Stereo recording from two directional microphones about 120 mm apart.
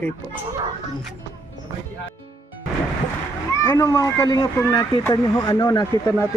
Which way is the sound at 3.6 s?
20° left (ahead or behind).